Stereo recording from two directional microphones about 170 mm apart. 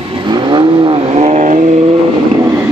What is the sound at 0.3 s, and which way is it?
Vehicle, 25° right (ahead or behind).